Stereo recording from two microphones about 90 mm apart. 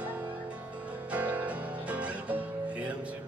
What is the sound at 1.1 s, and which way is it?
Music, 15° right (ahead or behind).